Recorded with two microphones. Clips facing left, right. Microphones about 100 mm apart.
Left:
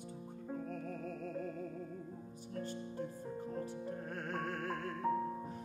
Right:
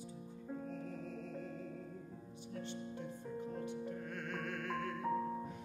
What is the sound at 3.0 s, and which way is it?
Music, 35° left (ahead or behind).